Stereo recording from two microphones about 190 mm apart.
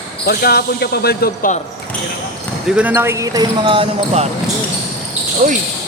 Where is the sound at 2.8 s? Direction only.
10° right (ahead or behind); by 4.2 s 30° right (ahead or behind).